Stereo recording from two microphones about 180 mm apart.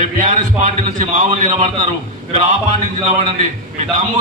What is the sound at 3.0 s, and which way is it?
Speech, 40° right (ahead or behind).